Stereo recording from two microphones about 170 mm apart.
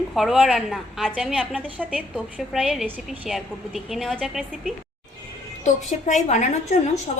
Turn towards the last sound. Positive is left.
turn(degrees=45)  # may be behind; listen again after turning